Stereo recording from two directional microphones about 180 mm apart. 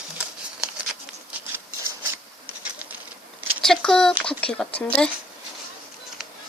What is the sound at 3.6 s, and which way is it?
Speech, centre (ahead or behind).